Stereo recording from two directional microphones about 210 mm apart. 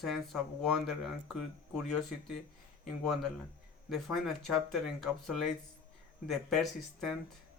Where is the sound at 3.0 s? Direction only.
Centre (ahead or behind).